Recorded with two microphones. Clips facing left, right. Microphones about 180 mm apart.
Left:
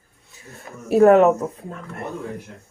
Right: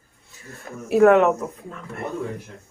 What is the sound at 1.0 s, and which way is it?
Speech, 35° left (ahead or behind).